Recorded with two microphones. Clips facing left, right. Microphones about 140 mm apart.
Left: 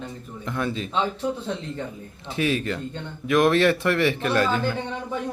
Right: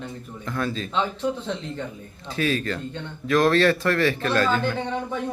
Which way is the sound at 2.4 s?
20° left (ahead or behind).